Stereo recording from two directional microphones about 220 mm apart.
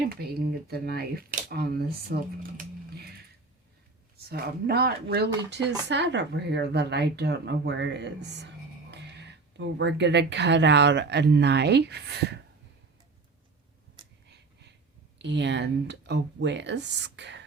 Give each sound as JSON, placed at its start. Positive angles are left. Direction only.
{"t": 0.1, "sound": "speech", "side_deg": -45}
{"t": 4.3, "sound": "speech", "side_deg": -45}
{"t": 14.3, "sound": "a sound", "side_deg": -50}
{"t": 15.2, "sound": "speech", "side_deg": -50}